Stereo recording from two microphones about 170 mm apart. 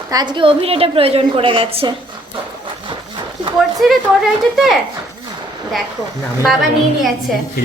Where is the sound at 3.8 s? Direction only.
Centre (ahead or behind).